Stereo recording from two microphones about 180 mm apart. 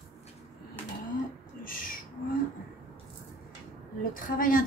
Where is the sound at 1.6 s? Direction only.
50° left (ahead or behind).